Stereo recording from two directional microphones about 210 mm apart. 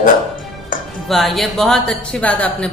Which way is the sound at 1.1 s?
Centre (ahead or behind).